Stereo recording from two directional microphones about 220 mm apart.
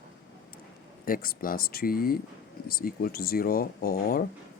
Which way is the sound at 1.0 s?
40° left (ahead or behind).